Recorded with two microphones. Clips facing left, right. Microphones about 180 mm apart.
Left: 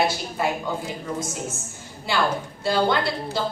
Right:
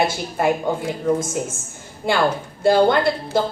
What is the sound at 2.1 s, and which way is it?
A woman's voice, 50° right (ahead or behind).